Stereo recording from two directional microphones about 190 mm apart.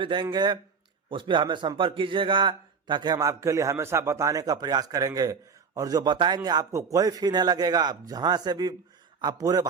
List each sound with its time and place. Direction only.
0.0 s a man's voice: 25° right (ahead or behind)